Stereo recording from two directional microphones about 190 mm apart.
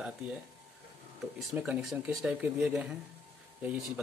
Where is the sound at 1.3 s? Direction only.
5° right (ahead or behind).